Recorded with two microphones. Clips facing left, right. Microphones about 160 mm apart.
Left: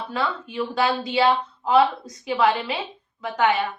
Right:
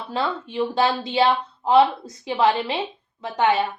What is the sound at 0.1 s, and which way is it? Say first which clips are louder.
A woman's voice: right 3 dB; 30° right (ahead or behind).